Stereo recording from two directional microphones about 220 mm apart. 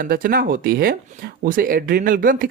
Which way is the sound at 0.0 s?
40° right (ahead or behind).